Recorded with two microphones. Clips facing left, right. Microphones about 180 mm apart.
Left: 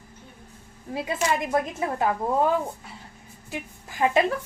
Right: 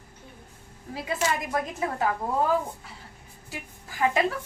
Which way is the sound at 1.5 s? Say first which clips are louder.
Left 3 dB; 25° left (ahead or behind).